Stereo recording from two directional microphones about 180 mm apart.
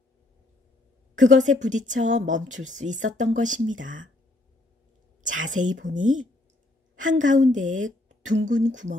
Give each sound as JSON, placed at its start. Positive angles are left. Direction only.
{"t": 1.3, "sound": "a woman's voice", "side_deg": -45}
{"t": 5.2, "sound": "a woman's voice", "side_deg": -45}